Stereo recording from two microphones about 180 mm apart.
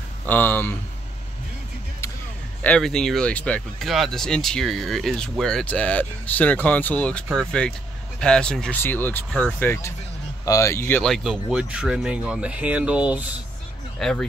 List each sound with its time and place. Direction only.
0.3 s speech: 10° left (ahead or behind)
2.6 s speech: 5° left (ahead or behind)
11.0 s speech: centre (ahead or behind)
13.9 s speech: 5° left (ahead or behind)